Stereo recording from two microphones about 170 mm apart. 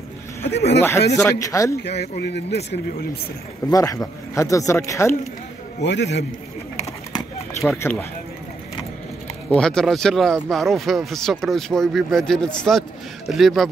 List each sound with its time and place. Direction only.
0.4 s speech: 40° left (ahead or behind)
0.7 s speech: 15° left (ahead or behind)
1.8 s speech: 75° left (ahead or behind)
3.6 s speech: 20° left (ahead or behind)
5.8 s a man's voice: 85° left
7.8 s speech: 15° left (ahead or behind)
9.5 s speech: 5° left (ahead or behind)